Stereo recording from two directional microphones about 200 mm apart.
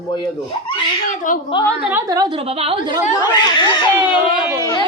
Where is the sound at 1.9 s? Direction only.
20° right (ahead or behind).